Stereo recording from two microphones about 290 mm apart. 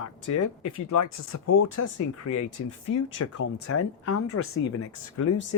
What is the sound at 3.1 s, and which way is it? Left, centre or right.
Speech, left.